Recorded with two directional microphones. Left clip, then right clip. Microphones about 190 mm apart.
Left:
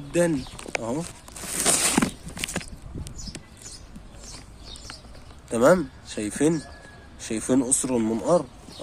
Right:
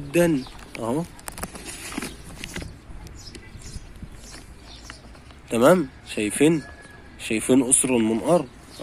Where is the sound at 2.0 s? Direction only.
40° left (ahead or behind).